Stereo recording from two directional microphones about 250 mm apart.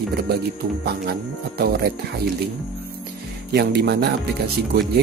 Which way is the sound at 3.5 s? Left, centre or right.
Right.